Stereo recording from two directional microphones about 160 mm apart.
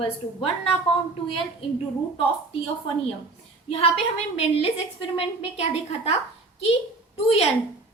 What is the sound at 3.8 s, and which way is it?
A woman's voice, 40° left (ahead or behind).